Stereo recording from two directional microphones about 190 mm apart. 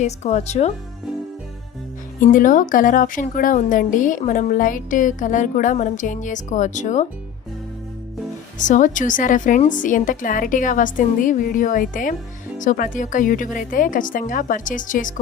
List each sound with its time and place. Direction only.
0.0 s speech: 35° left (ahead or behind)
2.2 s a woman's voice: 45° left (ahead or behind)
8.5 s a woman's voice: 40° left (ahead or behind)